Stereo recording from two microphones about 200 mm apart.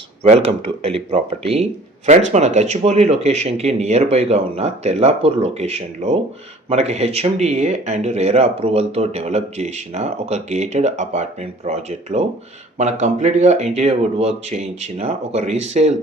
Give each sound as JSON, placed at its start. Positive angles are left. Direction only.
{"t": 0.2, "sound": "speech", "side_deg": -30}